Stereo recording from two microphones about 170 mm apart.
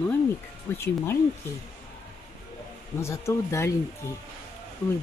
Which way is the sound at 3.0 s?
15° left (ahead or behind).